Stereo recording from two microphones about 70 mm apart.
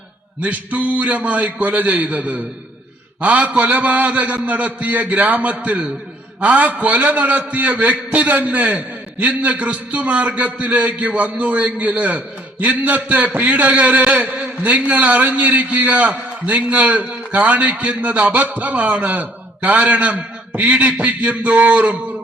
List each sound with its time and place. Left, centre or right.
0.4 s a man's voice: right